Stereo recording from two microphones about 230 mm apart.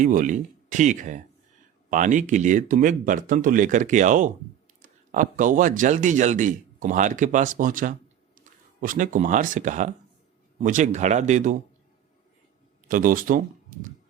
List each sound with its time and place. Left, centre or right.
0.0 s speech: right
12.9 s speech: right